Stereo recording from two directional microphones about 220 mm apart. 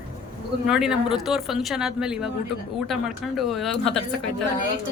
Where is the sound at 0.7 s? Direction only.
Centre (ahead or behind).